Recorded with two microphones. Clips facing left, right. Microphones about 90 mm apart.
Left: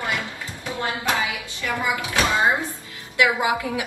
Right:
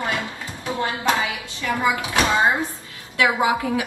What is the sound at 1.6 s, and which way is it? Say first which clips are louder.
Speech: right 3 dB; 25° right (ahead or behind).